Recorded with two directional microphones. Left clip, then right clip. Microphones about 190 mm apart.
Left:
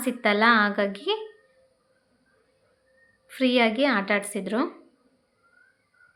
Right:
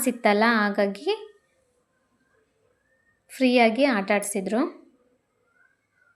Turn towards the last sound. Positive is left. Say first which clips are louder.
# right 2 dB
turn(degrees=-15)  # may be behind; listen again after turning